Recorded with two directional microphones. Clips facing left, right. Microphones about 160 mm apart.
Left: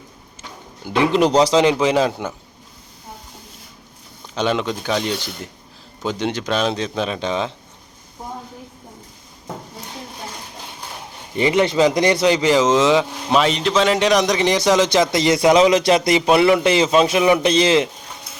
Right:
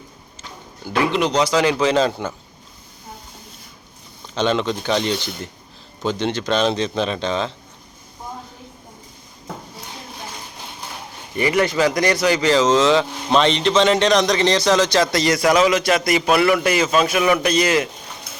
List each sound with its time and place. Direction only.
1.1 s speech: 35° left (ahead or behind)
1.6 s speech: 15° left (ahead or behind)
4.4 s speech: 10° left (ahead or behind)
11.3 s a man's voice: 20° left (ahead or behind)